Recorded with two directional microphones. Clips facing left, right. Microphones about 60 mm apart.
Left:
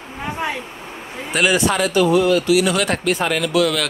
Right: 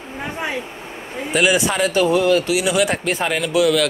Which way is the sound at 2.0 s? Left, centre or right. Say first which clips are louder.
Even; right.